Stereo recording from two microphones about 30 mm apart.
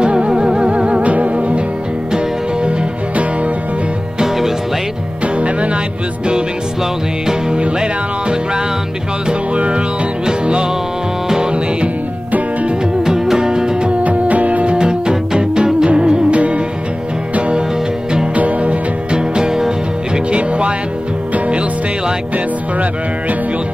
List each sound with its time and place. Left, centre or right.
0.0 s music: right
1.0 s music: right
5.2 s music: right
7.5 s music: right
10.4 s music: right
13.0 s music: right
14.0 s music: right
14.6 s music: right
16.3 s music: right
18.3 s music: right
19.1 s music: right
20.2 s music: right